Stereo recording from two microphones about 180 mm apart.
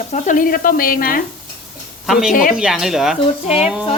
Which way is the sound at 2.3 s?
50° left (ahead or behind).